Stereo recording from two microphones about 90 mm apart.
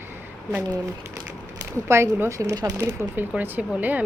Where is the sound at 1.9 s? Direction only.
30° right (ahead or behind).